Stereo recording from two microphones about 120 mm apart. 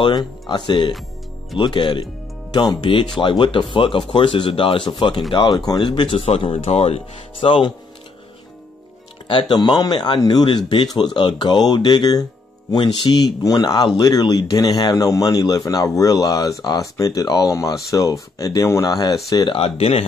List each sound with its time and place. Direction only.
0.0 s speech: 40° left (ahead or behind)
9.3 s speech: 40° left (ahead or behind)
19.5 s speech: 50° left (ahead or behind)